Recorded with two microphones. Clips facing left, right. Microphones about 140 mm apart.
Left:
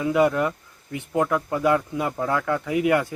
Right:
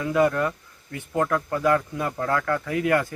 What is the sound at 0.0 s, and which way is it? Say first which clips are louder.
Speech: left 1 dB; 15° left (ahead or behind).